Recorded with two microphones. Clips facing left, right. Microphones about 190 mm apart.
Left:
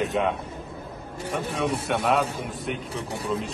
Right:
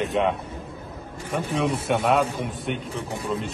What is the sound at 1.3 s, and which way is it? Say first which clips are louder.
Speech: right 2 dB; centre (ahead or behind).